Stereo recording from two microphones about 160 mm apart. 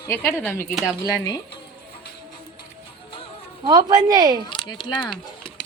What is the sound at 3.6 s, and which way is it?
Speech, 25° right (ahead or behind).